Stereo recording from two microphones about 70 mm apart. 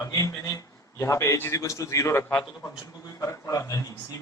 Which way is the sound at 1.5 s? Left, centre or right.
Left.